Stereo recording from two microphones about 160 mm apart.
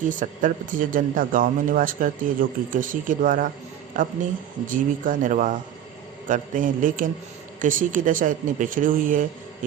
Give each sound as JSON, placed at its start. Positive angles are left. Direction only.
{"t": 0.1, "sound": "a man's voice", "side_deg": -55}